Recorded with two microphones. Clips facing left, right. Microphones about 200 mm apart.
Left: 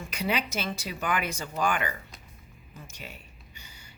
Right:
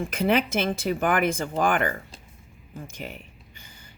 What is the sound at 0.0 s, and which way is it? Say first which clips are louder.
Speech: right 8 dB; 50° right (ahead or behind).